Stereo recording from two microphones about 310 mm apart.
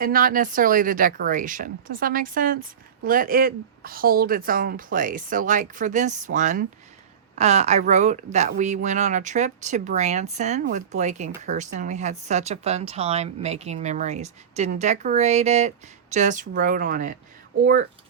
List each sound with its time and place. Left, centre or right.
0.0 s speech: right